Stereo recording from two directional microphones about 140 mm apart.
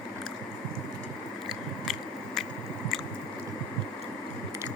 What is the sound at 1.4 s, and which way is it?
Biting, centre (ahead or behind).